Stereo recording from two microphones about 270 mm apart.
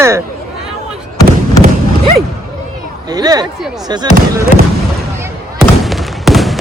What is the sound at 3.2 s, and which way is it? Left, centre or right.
Speech, centre.